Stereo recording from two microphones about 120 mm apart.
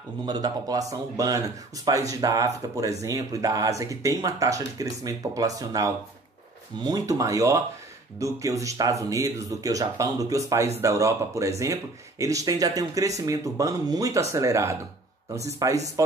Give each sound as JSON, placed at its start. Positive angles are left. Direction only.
{"t": 0.2, "sound": "a man's voice", "side_deg": -35}